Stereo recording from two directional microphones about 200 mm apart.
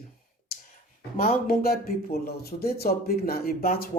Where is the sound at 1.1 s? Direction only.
50° left (ahead or behind).